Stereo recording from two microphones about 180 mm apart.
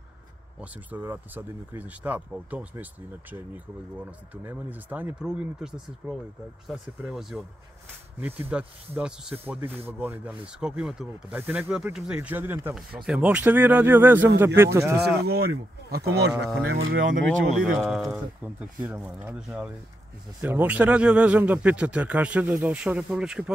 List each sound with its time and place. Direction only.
0.6 s speech: 10° right (ahead or behind)
15.2 s speech: 60° right (ahead or behind)
16.6 s speech: 50° right (ahead or behind)
17.6 s speech: centre (ahead or behind)